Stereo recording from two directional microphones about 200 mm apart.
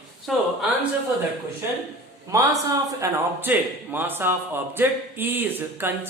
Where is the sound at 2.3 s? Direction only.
15° right (ahead or behind).